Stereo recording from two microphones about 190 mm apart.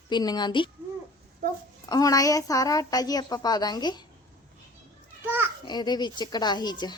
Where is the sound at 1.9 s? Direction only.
20° left (ahead or behind).